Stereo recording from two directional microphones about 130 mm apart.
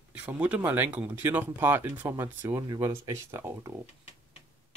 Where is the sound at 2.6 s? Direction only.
30° right (ahead or behind).